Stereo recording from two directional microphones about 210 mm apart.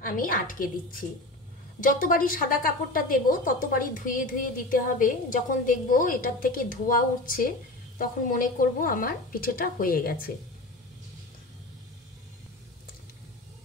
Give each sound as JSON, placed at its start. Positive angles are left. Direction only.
{"t": 0.0, "sound": "speech", "side_deg": 40}
{"t": 1.8, "sound": "a woman's voice", "side_deg": 40}